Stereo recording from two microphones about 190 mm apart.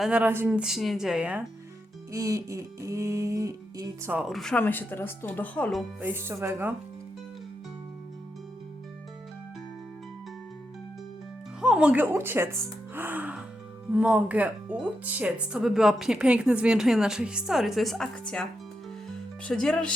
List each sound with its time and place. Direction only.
0.0 s speech: 5° right (ahead or behind)
2.1 s a sound: 15° right (ahead or behind)
4.1 s speech: centre (ahead or behind)
6.0 s a sound: 10° right (ahead or behind)
11.6 s speech: 5° right (ahead or behind)
19.5 s speech: 5° left (ahead or behind)